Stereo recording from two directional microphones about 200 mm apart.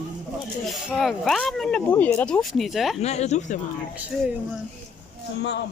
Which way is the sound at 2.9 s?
35° left (ahead or behind).